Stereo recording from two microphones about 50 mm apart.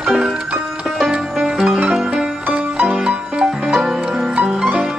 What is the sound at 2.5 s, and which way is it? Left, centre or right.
Music, right.